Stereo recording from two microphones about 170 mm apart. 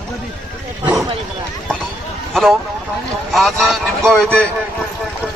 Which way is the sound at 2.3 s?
Centre (ahead or behind).